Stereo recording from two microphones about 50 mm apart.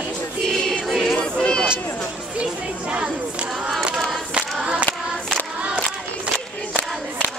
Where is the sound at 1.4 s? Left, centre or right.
Centre.